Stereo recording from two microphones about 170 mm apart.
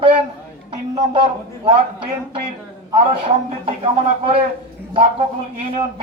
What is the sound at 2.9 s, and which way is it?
Speech, 35° right (ahead or behind).